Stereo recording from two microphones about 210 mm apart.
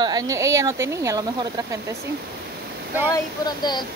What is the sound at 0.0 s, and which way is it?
A woman's voice, 15° right (ahead or behind).